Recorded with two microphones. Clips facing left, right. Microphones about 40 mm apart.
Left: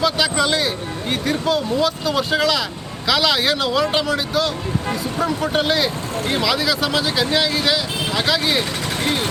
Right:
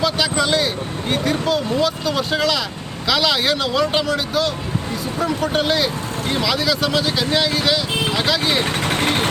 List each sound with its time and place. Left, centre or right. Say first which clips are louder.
0.0 s a sound: left 1 dB; centre
1.1 s speech: right 1 dB; centre
8.8 s vehicle: right 3 dB; right